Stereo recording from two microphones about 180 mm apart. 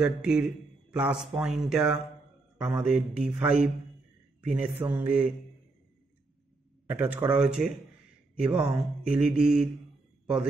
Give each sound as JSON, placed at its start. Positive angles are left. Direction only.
{"t": 0.0, "sound": "speech", "side_deg": -5}
{"t": 6.9, "sound": "speech", "side_deg": -10}